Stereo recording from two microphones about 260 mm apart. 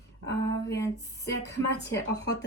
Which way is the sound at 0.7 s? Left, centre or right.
Centre.